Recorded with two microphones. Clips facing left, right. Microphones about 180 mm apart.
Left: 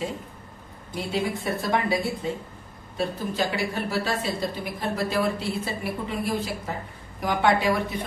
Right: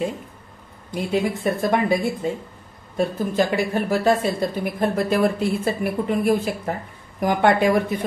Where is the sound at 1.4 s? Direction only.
55° right (ahead or behind).